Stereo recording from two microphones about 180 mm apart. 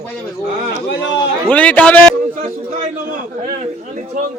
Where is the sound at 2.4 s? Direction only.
45° right (ahead or behind).